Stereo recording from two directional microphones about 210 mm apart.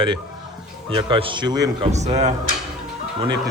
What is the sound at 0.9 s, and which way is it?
Speech, 25° right (ahead or behind).